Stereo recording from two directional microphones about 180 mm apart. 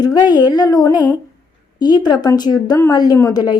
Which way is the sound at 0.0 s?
20° left (ahead or behind).